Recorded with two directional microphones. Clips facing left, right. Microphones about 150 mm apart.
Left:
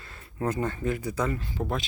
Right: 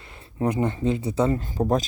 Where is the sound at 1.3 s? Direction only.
40° right (ahead or behind).